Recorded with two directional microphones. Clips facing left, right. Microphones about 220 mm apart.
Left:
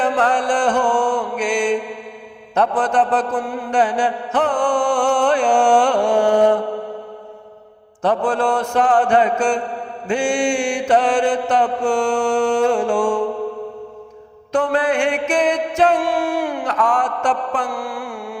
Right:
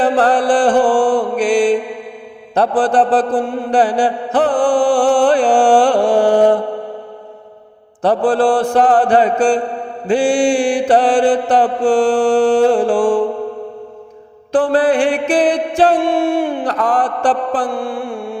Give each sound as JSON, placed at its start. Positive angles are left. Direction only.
{"t": 0.0, "sound": "mantra", "side_deg": -35}
{"t": 8.0, "sound": "mantra", "side_deg": -35}
{"t": 14.5, "sound": "mantra", "side_deg": -35}
{"t": 16.7, "sound": "mantra", "side_deg": -35}